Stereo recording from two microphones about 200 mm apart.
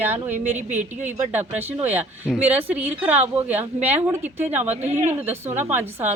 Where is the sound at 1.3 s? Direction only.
10° right (ahead or behind).